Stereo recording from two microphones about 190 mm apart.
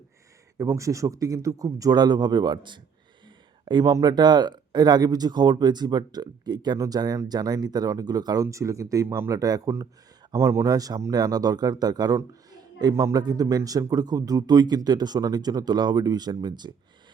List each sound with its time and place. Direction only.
0.6 s speech: 15° right (ahead or behind)